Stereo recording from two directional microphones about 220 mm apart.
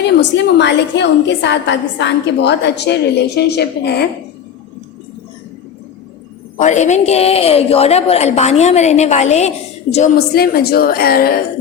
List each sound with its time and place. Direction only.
0.2 s a woman's voice: 50° left (ahead or behind)
6.6 s a woman's voice: 35° left (ahead or behind)
10.2 s a woman's voice: 45° left (ahead or behind)